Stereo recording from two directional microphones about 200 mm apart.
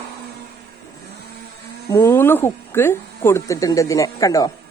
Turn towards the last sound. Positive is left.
turn(degrees=15)  # may be behind; listen again after turning